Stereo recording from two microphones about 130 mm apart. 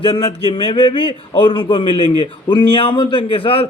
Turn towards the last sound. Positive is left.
turn(degrees=45)  # may be behind; listen again after turning